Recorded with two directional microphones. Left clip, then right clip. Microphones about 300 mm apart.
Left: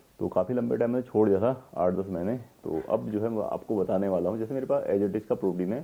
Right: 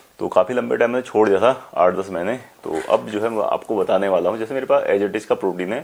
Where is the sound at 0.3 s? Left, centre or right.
Centre.